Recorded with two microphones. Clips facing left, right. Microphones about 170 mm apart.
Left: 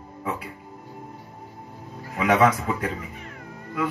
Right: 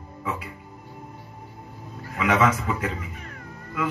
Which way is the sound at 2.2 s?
35° left (ahead or behind).